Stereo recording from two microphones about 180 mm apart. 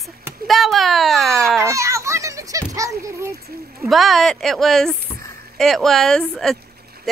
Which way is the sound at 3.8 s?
Centre (ahead or behind).